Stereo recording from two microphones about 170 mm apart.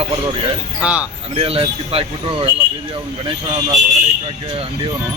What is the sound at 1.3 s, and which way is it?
Speech, 35° right (ahead or behind).